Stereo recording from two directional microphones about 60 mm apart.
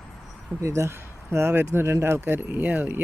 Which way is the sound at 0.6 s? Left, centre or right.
Right.